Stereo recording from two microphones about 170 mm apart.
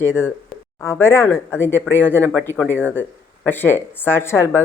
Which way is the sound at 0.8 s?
15° left (ahead or behind).